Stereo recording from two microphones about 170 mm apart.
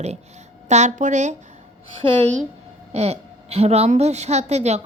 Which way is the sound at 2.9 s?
40° right (ahead or behind).